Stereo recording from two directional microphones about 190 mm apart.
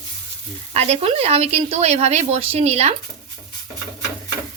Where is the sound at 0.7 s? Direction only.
30° right (ahead or behind).